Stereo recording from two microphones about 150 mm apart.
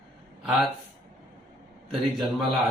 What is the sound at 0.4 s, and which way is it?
Speech, centre (ahead or behind).